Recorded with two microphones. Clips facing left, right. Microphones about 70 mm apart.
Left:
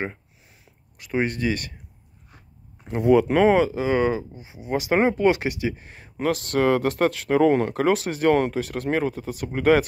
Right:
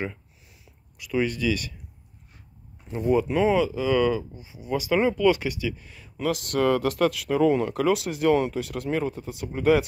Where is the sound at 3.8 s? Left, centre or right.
Left.